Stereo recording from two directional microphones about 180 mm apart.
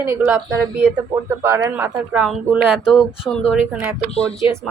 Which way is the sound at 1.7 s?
10° right (ahead or behind).